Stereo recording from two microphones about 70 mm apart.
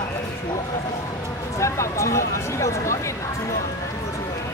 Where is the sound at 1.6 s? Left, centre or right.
Left.